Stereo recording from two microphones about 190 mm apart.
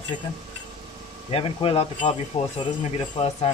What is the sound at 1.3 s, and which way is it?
Speech, 30° left (ahead or behind).